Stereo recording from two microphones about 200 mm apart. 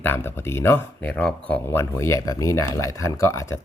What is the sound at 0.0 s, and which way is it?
Speech, 10° left (ahead or behind).